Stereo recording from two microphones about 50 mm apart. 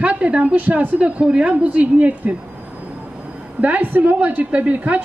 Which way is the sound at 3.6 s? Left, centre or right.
Right.